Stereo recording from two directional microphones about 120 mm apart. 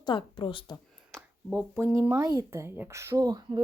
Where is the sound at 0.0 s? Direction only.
45° left (ahead or behind).